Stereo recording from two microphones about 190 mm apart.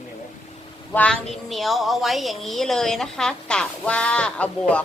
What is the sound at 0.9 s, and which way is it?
A woman's voice, 5° left (ahead or behind).